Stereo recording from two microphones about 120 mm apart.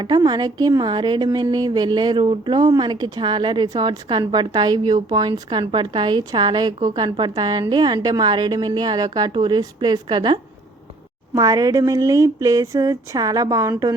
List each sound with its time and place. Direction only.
0.0 s a woman's voice: 35° right (ahead or behind)
11.3 s speech: 30° right (ahead or behind)